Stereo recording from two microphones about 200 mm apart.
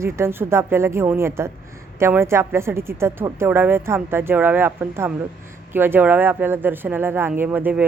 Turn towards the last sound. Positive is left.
turn(degrees=-10)  # may be behind; listen again after turning